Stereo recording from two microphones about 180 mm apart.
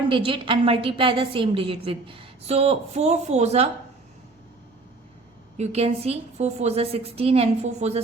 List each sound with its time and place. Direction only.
0.1 s a woman's voice: 30° right (ahead or behind)
5.5 s a woman's voice: 35° right (ahead or behind)